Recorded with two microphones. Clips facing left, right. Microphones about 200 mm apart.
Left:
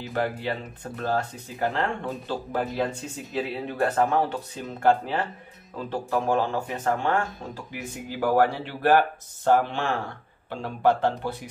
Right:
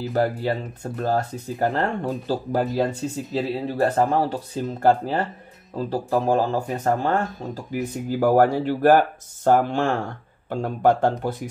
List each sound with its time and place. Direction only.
0.0 s speech: 40° right (ahead or behind)